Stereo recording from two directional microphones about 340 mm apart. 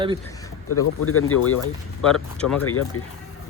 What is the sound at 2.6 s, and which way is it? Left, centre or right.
Speech, left.